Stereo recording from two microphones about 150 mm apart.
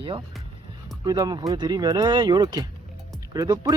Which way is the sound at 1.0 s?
25° right (ahead or behind).